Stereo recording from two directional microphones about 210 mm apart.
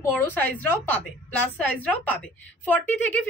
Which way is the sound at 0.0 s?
10° left (ahead or behind).